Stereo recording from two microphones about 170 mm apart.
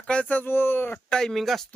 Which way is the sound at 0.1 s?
10° left (ahead or behind).